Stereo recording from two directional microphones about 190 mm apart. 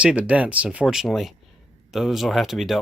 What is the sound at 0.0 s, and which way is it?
Speech, 5° right (ahead or behind).